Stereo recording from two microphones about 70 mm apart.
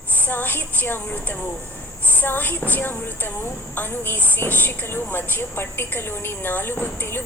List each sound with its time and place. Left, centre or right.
0.3 s a woman's voice: left